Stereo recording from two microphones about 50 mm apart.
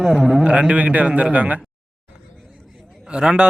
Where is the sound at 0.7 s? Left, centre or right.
Right.